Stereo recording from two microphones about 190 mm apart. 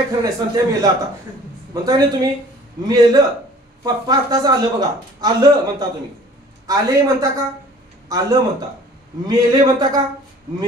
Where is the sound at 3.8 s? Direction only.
20° right (ahead or behind).